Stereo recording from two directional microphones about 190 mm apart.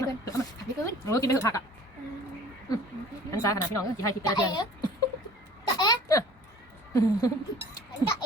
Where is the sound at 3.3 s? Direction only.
15° left (ahead or behind).